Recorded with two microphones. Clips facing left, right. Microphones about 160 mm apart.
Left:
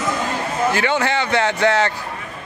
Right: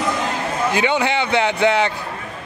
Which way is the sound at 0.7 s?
15° right (ahead or behind).